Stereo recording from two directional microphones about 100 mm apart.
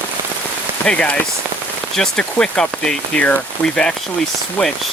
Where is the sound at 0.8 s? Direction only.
10° left (ahead or behind).